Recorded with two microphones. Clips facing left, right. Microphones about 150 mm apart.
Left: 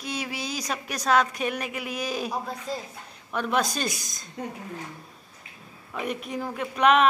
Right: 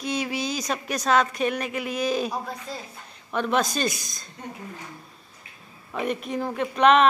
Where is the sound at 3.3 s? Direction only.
5° left (ahead or behind).